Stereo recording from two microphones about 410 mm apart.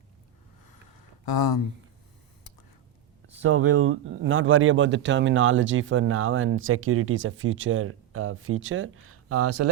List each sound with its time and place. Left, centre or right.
1.2 s speech: left
3.4 s speech: right